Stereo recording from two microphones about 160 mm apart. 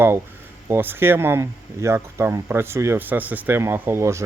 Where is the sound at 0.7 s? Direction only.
15° right (ahead or behind).